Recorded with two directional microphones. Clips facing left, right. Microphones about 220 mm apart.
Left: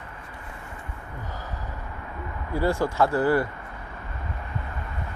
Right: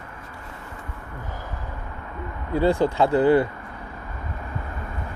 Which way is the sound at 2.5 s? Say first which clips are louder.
Right 5 dB; 20° right (ahead or behind).